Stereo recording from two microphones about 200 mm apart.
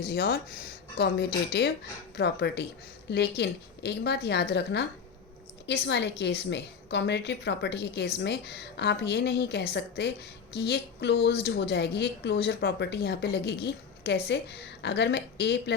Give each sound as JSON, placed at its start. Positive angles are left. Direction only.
{"t": 0.0, "sound": "a woman's voice", "side_deg": 50}